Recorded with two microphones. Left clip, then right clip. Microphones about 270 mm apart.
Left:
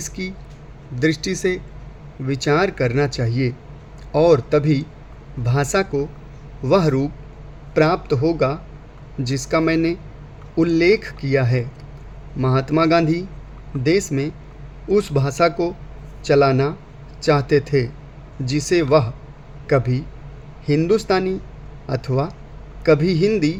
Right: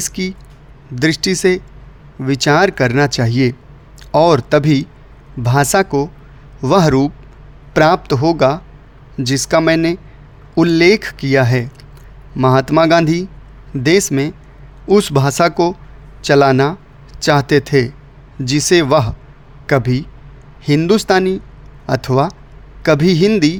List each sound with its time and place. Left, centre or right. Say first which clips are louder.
0.0 s a man's voice: right 7 dB; right